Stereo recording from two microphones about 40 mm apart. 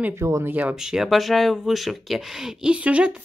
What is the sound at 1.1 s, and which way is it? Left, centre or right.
Speech, centre.